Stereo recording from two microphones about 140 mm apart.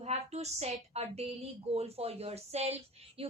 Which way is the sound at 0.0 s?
50° right (ahead or behind).